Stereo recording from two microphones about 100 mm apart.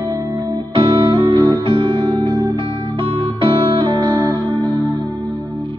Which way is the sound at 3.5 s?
55° right (ahead or behind).